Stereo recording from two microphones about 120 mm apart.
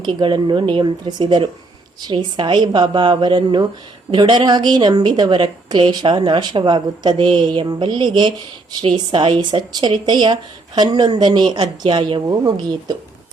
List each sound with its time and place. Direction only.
0.0 s a woman's voice: 40° right (ahead or behind)